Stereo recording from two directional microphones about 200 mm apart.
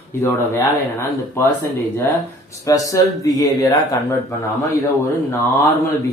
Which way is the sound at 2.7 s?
15° left (ahead or behind).